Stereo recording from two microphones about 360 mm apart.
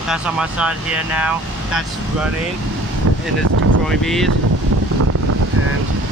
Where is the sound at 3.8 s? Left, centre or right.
Centre.